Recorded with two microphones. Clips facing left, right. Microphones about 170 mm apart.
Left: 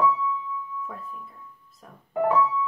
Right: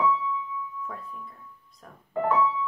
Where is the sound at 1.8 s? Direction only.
5° left (ahead or behind).